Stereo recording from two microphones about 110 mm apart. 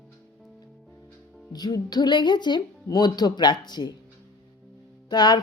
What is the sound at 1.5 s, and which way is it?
Speech, 40° left (ahead or behind).